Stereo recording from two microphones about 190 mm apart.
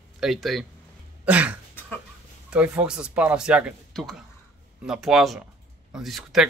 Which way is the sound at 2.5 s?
5° right (ahead or behind).